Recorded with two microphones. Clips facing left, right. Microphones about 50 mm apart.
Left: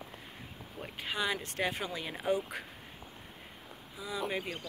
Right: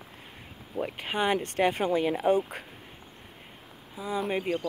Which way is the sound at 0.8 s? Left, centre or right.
Right.